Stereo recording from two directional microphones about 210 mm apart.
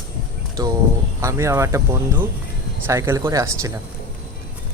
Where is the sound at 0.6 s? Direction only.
15° right (ahead or behind).